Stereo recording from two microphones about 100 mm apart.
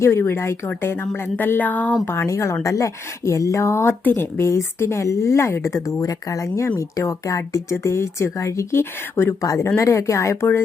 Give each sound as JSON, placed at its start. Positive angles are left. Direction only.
{"t": 0.0, "sound": "speech", "side_deg": 25}
{"t": 2.0, "sound": "speech", "side_deg": 25}
{"t": 9.4, "sound": "speech", "side_deg": 35}